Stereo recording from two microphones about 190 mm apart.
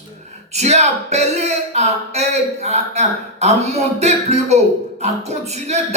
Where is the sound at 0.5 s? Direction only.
35° right (ahead or behind).